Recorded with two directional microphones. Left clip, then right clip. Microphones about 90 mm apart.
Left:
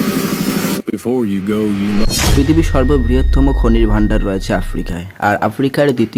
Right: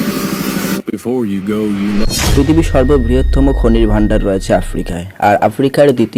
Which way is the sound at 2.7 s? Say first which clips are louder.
Right 3 dB; 30° right (ahead or behind).